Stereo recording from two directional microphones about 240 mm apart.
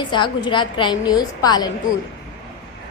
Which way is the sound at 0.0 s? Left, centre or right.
Centre.